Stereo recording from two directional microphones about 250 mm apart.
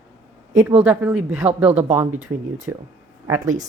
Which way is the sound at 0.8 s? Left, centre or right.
Centre.